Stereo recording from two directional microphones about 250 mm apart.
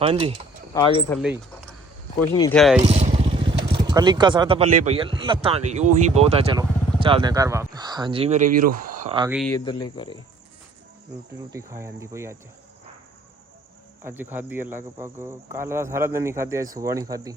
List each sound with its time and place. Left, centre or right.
0.0 s speech: right
0.7 s speech: centre
1.1 s speech: centre
2.3 s speech: centre
2.6 s speech: centre
2.8 s motorcycle: right
3.7 s speech: centre; by 9.1 s right
9.5 s speech: centre
11.3 s speech: centre
14.0 s speech: centre